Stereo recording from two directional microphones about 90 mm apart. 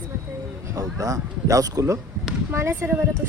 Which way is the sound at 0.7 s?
40° right (ahead or behind).